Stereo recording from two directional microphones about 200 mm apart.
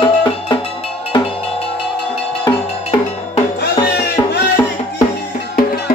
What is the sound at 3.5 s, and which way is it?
Music, 55° left (ahead or behind).